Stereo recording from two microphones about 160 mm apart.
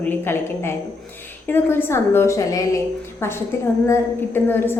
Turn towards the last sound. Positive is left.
turn(degrees=15)  # may be behind; listen again after turning